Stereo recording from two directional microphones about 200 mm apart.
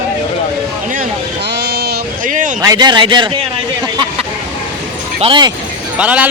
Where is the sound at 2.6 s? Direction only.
20° right (ahead or behind).